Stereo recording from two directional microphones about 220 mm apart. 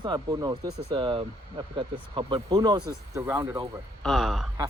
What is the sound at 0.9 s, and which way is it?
Speech, 25° right (ahead or behind).